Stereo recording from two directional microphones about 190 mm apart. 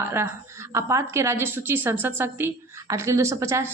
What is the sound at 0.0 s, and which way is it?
A woman's voice, 15° right (ahead or behind).